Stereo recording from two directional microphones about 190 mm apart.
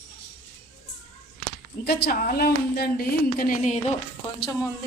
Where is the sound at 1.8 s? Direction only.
55° left (ahead or behind).